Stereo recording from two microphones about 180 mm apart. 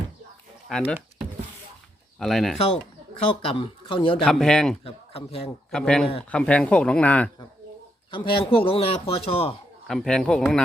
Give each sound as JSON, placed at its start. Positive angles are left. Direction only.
{"t": 0.7, "sound": "speech", "side_deg": 5}
{"t": 2.1, "sound": "speech", "side_deg": 0}
{"t": 3.4, "sound": "speech", "side_deg": 30}
{"t": 4.2, "sound": "speech", "side_deg": 5}
{"t": 4.8, "sound": "a man's voice", "side_deg": 30}
{"t": 5.7, "sound": "speech", "side_deg": 5}
{"t": 8.1, "sound": "a man's voice", "side_deg": 30}
{"t": 9.8, "sound": "speech", "side_deg": 0}